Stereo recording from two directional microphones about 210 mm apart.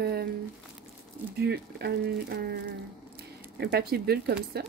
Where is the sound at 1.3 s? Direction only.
50° right (ahead or behind).